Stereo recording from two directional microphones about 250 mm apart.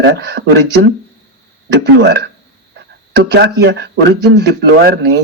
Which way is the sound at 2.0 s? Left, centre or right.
Right.